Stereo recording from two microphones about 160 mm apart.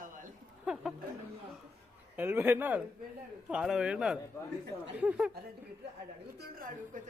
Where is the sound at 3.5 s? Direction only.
5° right (ahead or behind).